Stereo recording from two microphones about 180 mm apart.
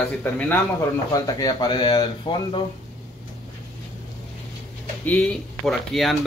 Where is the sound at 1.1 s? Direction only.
20° left (ahead or behind).